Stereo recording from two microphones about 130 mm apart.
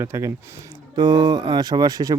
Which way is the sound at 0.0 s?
20° right (ahead or behind).